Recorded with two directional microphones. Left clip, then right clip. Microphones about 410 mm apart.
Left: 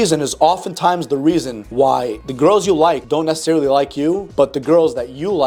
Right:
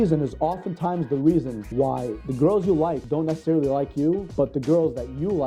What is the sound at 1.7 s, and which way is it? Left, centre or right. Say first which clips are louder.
Speech: left 10 dB; centre.